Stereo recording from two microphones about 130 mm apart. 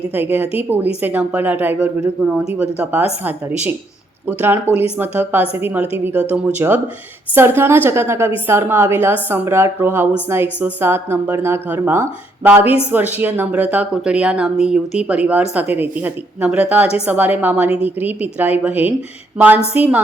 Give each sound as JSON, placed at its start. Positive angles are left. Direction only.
{"t": 0.1, "sound": "a woman's voice", "side_deg": -15}